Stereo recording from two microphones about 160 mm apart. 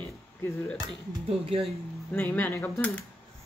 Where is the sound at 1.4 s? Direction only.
35° right (ahead or behind).